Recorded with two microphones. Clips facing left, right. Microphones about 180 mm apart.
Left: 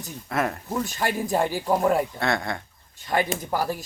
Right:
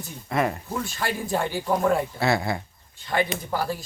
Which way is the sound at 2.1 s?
5° right (ahead or behind).